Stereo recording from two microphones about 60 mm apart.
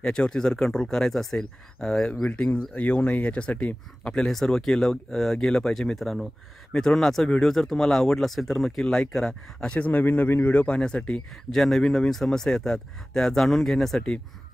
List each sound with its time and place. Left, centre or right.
0.0 s speech: centre
2.2 s speech: centre
9.8 s speech: left
11.5 s speech: centre